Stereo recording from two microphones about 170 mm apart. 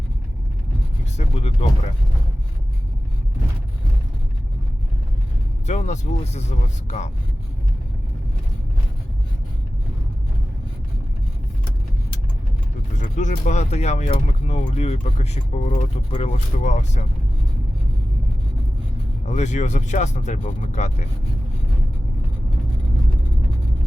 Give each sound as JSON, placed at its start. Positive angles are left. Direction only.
{"t": 1.1, "sound": "vehicle", "side_deg": 40}
{"t": 5.6, "sound": "speech", "side_deg": 45}
{"t": 13.0, "sound": "speech", "side_deg": 45}
{"t": 19.2, "sound": "speech", "side_deg": 45}